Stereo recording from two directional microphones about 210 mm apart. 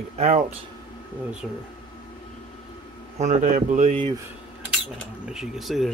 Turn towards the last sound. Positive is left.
turn(degrees=0)  # may be behind; listen again after turning